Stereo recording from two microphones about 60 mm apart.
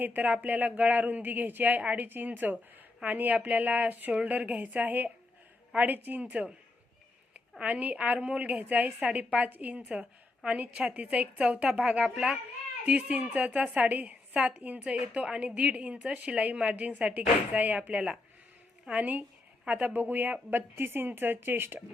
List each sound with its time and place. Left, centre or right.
0.0 s a woman's voice: right
7.6 s a woman's voice: right
12.8 s a woman's voice: right